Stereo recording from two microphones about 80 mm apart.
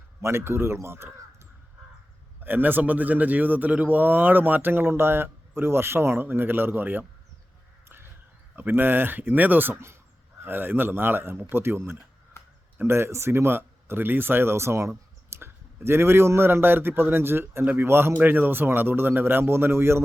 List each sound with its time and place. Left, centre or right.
0.2 s a man's voice: right
2.4 s speech: right
8.5 s speech: right
12.4 s a sound: left
12.7 s speech: right